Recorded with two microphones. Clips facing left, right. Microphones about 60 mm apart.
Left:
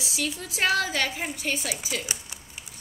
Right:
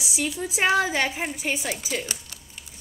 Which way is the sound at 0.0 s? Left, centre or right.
Centre.